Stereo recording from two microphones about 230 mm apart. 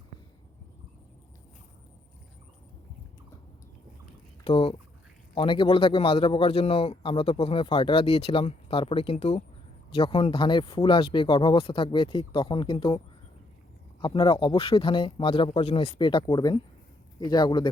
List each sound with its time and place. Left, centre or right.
4.4 s a man's voice: left
14.0 s a man's voice: centre